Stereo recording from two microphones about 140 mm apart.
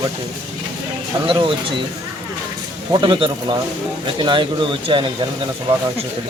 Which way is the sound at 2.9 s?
35° right (ahead or behind).